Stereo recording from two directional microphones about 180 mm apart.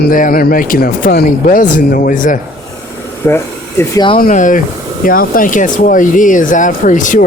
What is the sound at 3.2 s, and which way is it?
Speech, 15° left (ahead or behind).